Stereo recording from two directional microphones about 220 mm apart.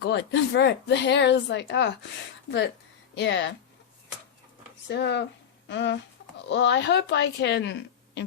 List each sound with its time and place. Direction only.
0.0 s speech: 50° left (ahead or behind)
3.2 s speech: 55° left (ahead or behind)
4.9 s speech: 50° left (ahead or behind)